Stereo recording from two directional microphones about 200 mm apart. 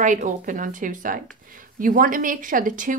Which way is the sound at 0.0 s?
40° right (ahead or behind).